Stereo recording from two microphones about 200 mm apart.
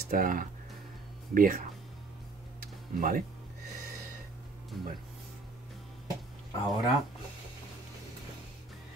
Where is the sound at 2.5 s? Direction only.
45° right (ahead or behind).